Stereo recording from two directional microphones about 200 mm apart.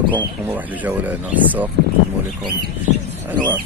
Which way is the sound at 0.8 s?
10° right (ahead or behind).